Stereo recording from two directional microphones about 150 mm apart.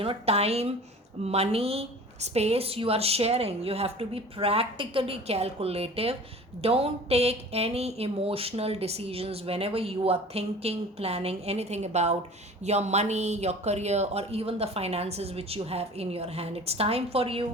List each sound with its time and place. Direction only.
0.0 s speech: 40° right (ahead or behind)